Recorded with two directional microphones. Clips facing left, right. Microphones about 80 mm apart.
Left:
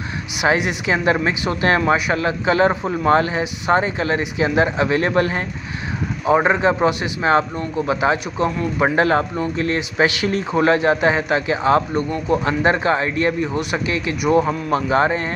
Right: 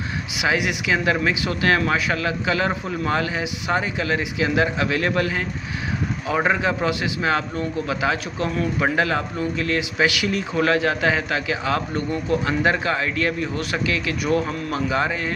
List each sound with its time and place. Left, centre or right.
0.5 s a man's voice: left
6.2 s a man's voice: left
14.7 s a man's voice: left